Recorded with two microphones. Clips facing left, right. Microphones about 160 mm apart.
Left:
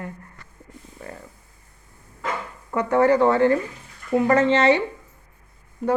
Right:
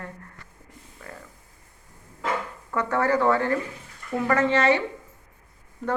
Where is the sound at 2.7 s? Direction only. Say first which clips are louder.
Left 5 dB; 20° left (ahead or behind).